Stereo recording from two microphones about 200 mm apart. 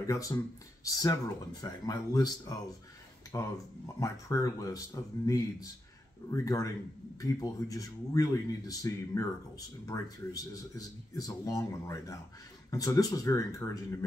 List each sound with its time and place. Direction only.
0.0 s speech: 15° left (ahead or behind)
3.3 s speech: 15° left (ahead or behind)